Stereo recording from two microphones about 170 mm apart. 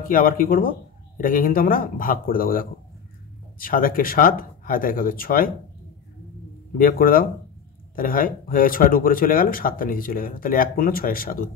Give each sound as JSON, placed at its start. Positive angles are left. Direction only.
{"t": 0.1, "sound": "speech", "side_deg": 55}
{"t": 6.8, "sound": "speech", "side_deg": 55}